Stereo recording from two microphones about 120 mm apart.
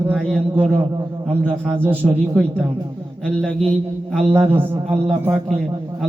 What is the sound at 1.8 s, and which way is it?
Speech, 15° right (ahead or behind).